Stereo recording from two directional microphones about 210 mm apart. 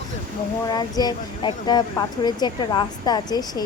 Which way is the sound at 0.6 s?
20° left (ahead or behind).